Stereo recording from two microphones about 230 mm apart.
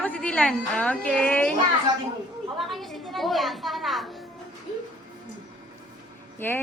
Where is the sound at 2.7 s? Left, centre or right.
Centre.